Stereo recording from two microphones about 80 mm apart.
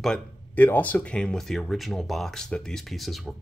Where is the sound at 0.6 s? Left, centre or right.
Left; by 3.3 s centre.